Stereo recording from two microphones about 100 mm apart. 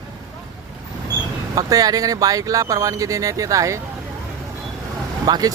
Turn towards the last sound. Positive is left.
turn(degrees=-40)  # may be behind; listen again after turning